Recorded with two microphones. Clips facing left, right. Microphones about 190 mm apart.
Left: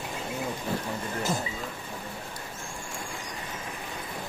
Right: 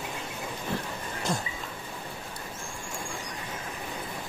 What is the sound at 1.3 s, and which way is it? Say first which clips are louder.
Speech: even; centre (ahead or behind).